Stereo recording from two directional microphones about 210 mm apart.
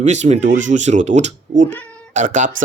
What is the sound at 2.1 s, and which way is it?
Speech, 35° right (ahead or behind).